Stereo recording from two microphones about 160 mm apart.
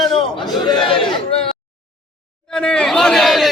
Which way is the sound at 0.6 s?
30° left (ahead or behind).